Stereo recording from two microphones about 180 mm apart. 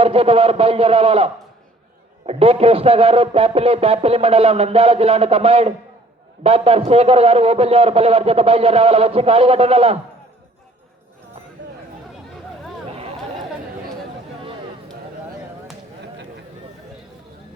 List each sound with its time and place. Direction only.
0.0 s a man's voice: 30° right (ahead or behind)